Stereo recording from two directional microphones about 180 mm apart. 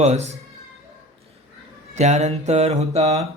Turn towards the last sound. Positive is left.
turn(degrees=-35)  # may be behind; listen again after turning